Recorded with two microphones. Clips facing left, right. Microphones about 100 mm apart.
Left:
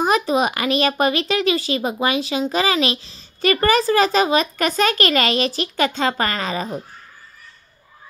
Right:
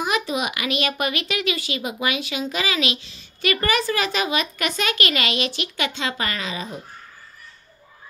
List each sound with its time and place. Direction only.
0.0 s a woman's voice: 40° left (ahead or behind)